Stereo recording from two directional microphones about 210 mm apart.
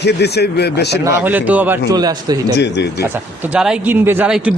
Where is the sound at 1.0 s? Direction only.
10° right (ahead or behind).